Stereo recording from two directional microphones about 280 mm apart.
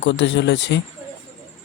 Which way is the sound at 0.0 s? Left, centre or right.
Left.